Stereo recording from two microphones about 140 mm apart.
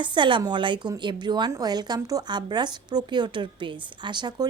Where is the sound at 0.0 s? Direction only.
35° right (ahead or behind).